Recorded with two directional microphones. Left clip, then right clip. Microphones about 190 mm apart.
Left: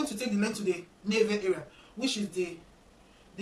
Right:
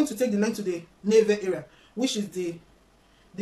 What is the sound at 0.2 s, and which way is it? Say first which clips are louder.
Speech: right 7 dB; 30° right (ahead or behind).